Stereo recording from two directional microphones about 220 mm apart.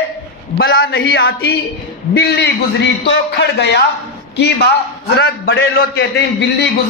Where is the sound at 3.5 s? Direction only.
50° left (ahead or behind).